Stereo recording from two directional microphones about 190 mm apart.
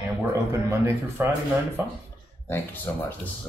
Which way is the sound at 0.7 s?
15° right (ahead or behind).